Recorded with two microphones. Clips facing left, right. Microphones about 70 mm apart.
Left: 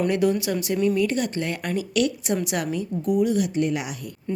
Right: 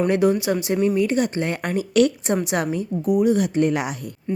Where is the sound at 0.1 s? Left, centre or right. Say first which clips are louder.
Right 3 dB; right.